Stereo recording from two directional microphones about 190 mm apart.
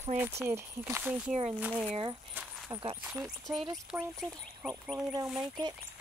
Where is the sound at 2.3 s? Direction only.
20° right (ahead or behind).